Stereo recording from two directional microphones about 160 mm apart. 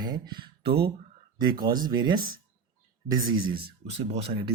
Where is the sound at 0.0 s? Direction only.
25° right (ahead or behind).